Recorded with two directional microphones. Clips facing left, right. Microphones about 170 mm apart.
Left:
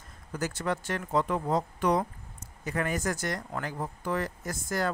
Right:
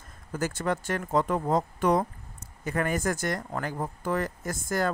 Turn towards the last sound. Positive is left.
turn(degrees=-50)  # may be behind; listen again after turning